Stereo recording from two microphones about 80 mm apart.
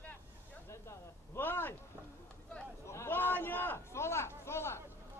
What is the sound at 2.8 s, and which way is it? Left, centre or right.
A man's voice, left.